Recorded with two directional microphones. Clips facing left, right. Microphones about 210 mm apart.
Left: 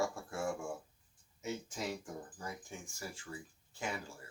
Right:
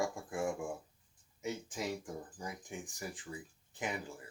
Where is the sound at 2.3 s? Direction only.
15° right (ahead or behind).